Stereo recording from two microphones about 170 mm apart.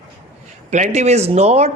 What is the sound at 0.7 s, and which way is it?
A woman's voice, 45° right (ahead or behind).